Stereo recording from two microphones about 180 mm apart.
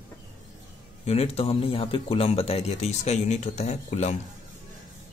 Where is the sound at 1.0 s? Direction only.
35° left (ahead or behind).